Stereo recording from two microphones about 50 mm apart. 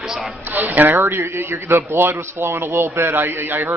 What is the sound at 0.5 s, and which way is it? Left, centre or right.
A man's voice, right.